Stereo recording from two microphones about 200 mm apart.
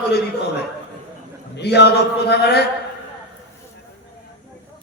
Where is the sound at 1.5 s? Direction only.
55° left (ahead or behind).